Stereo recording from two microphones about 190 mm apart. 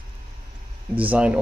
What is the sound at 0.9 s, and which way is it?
Speech, 5° right (ahead or behind).